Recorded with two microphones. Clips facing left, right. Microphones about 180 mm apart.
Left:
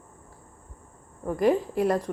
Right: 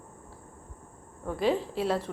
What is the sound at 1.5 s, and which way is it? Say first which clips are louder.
Speech: left 4 dB; 15° left (ahead or behind).